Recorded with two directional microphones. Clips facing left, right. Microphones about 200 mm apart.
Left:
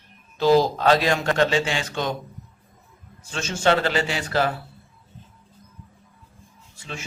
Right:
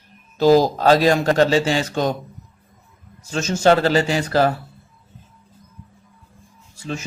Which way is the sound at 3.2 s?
40° right (ahead or behind).